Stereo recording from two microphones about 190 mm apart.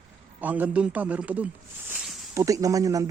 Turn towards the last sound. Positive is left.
turn(degrees=-15)  # may be behind; listen again after turning